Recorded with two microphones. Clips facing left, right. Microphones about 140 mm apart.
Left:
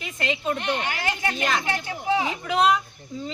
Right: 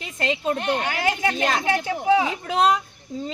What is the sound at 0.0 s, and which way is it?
A child's voice, 35° right (ahead or behind).